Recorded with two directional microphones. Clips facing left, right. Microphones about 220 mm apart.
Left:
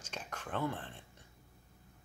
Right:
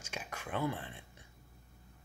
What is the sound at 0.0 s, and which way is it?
Whispering, 10° right (ahead or behind).